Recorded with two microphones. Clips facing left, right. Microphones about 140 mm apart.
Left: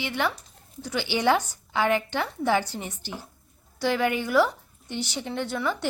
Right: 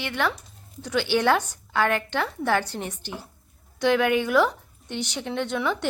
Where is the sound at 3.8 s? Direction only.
5° left (ahead or behind).